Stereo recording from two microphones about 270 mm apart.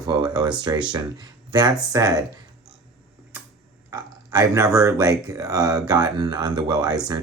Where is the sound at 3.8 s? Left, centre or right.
Centre.